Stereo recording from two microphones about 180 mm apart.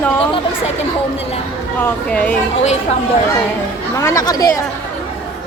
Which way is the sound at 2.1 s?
5° left (ahead or behind).